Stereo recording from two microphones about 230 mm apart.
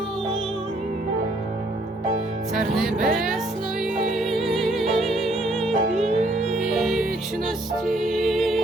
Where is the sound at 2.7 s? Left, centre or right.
Centre.